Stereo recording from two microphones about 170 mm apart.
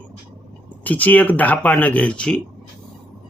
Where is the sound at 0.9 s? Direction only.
10° left (ahead or behind).